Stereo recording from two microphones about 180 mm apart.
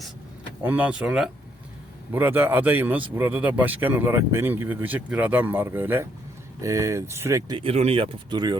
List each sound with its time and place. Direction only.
0.6 s speech: 10° right (ahead or behind)